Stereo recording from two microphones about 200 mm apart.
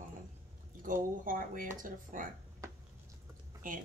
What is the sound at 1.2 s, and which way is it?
A woman's voice, 45° right (ahead or behind).